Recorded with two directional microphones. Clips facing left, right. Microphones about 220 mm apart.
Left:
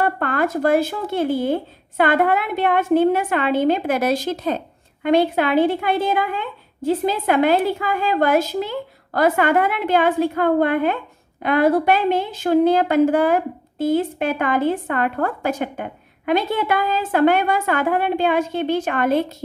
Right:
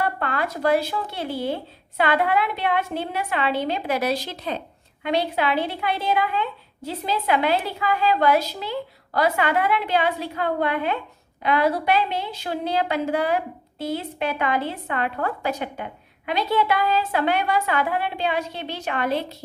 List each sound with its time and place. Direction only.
0.0 s speech: 50° left (ahead or behind)